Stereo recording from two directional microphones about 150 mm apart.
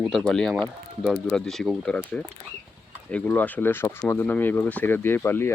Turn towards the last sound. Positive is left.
turn(degrees=15)  # may be behind; listen again after turning